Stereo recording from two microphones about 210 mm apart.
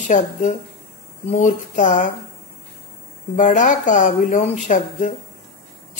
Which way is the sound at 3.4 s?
35° left (ahead or behind).